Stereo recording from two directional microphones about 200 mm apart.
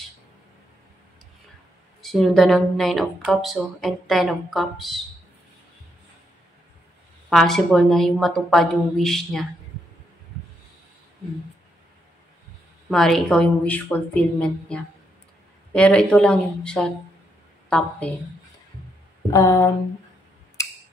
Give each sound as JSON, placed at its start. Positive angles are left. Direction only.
{"t": 2.0, "sound": "speech", "side_deg": 0}
{"t": 7.2, "sound": "speech", "side_deg": 0}
{"t": 12.9, "sound": "a woman's voice", "side_deg": 0}
{"t": 19.3, "sound": "a sound", "side_deg": 15}